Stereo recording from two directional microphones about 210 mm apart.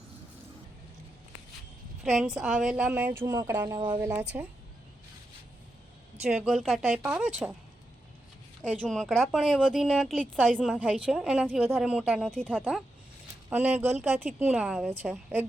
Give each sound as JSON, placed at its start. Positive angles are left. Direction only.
{"t": 2.0, "sound": "a woman's voice", "side_deg": 0}
{"t": 6.2, "sound": "a woman's voice", "side_deg": 0}
{"t": 8.6, "sound": "a woman's voice", "side_deg": -5}
{"t": 13.5, "sound": "speech", "side_deg": -5}